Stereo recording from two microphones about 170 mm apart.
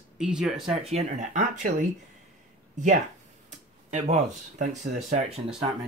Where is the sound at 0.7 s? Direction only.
40° right (ahead or behind).